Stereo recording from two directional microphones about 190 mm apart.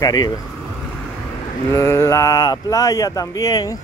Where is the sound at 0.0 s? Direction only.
20° left (ahead or behind).